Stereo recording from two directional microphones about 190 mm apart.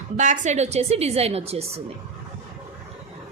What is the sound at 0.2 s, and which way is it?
A woman's voice, 40° right (ahead or behind).